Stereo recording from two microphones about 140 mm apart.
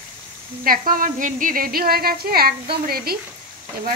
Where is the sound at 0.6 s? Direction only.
90° right.